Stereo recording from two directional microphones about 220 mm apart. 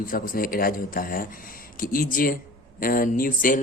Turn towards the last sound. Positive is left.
turn(degrees=40)  # may be behind; listen again after turning